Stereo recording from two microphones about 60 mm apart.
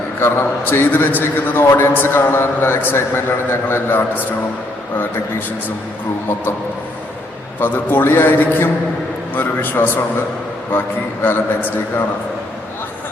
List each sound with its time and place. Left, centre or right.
0.2 s a man's voice: left
7.6 s a man's voice: left